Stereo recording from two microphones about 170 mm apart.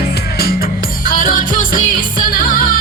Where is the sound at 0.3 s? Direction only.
60° left (ahead or behind).